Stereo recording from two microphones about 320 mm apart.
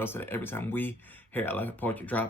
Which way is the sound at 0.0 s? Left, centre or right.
Centre.